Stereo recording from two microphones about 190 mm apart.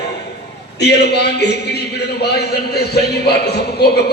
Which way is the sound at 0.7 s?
60° left (ahead or behind).